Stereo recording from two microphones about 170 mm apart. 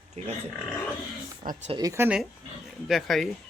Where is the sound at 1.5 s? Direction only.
55° right (ahead or behind).